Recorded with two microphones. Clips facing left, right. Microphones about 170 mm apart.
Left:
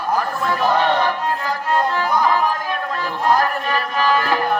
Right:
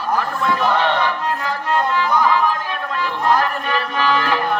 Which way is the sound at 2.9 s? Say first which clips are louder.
Right 1 dB; 40° left (ahead or behind).